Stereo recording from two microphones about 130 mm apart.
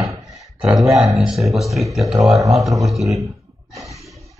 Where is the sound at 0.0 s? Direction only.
Centre (ahead or behind).